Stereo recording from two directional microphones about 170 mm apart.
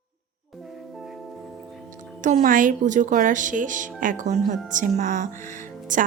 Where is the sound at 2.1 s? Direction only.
50° right (ahead or behind).